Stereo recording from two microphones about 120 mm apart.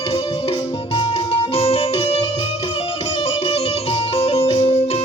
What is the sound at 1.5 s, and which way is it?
Music, 55° left (ahead or behind).